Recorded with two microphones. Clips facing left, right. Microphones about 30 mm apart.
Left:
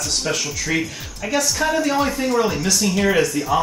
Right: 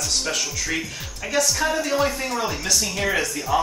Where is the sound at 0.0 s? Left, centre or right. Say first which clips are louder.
Left 2 dB; centre.